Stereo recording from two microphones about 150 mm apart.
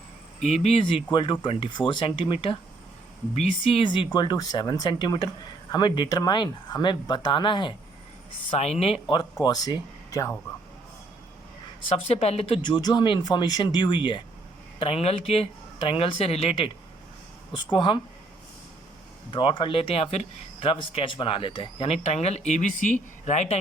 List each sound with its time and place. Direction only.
0.3 s speech: 50° left (ahead or behind); by 7.7 s 30° left (ahead or behind)
8.4 s speech: 45° left (ahead or behind); by 10.3 s 25° left (ahead or behind)
11.9 s speech: 45° left (ahead or behind)
19.3 s speech: 35° left (ahead or behind); by 23.6 s 50° left (ahead or behind)